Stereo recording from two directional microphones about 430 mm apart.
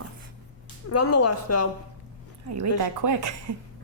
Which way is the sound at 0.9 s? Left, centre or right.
Left.